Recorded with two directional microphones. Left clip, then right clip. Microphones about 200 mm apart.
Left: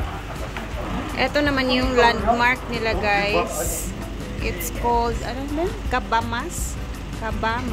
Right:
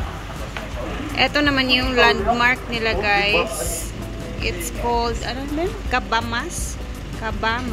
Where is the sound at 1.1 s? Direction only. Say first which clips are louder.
Right 3 dB; 5° left (ahead or behind).